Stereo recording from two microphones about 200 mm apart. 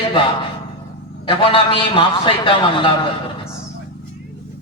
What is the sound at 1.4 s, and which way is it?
A man's voice, 25° left (ahead or behind).